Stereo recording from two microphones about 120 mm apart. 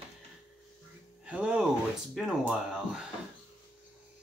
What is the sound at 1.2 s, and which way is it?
Music, 10° right (ahead or behind).